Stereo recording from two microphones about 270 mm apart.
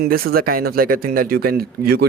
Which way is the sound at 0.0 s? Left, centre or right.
Right.